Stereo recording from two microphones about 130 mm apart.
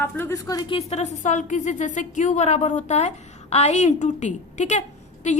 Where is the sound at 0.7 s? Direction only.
55° left (ahead or behind).